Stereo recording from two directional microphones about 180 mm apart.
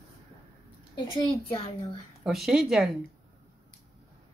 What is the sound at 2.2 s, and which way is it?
Speech, centre (ahead or behind).